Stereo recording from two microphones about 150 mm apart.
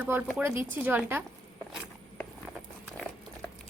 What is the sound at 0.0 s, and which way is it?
A woman's voice, 10° right (ahead or behind).